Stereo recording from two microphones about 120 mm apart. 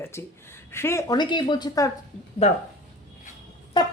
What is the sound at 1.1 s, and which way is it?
Speech, 40° left (ahead or behind).